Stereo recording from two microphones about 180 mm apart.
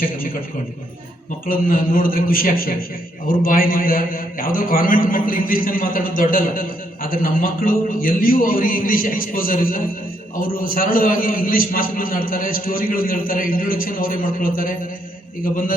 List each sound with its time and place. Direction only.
1.5 s a man's voice: 50° left (ahead or behind)